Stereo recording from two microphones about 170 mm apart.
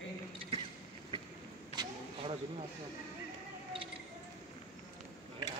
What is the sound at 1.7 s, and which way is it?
Vehicle, 25° right (ahead or behind).